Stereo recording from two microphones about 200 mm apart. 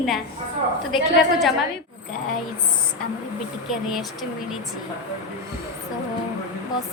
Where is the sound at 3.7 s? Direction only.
Centre (ahead or behind).